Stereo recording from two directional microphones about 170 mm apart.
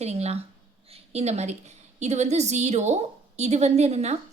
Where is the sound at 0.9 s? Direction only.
35° right (ahead or behind).